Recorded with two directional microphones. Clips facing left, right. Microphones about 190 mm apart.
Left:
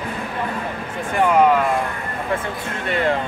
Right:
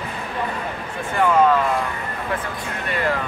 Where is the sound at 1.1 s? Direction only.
15° left (ahead or behind).